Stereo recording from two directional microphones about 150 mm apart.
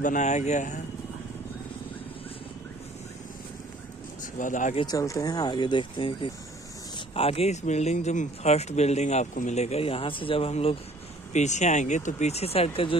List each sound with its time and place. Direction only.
0.0 s speech: 55° left (ahead or behind)
4.2 s speech: 60° left (ahead or behind)
4.7 s speech: 25° left (ahead or behind)
11.3 s speech: 50° left (ahead or behind)